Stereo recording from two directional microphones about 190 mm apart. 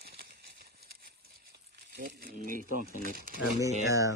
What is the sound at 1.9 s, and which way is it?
Speech, 50° right (ahead or behind).